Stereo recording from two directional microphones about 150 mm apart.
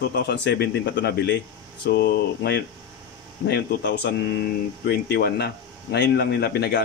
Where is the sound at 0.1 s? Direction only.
90° left.